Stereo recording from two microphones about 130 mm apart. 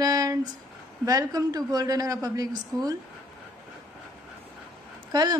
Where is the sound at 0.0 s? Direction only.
30° right (ahead or behind).